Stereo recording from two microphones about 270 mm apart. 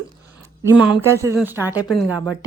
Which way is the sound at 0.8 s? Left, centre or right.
Centre.